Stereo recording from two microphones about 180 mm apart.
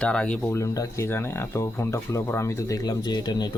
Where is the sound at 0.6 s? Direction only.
20° left (ahead or behind).